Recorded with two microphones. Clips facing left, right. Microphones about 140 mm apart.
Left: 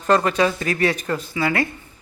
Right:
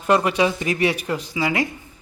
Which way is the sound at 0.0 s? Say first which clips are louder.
Even; 10° right (ahead or behind).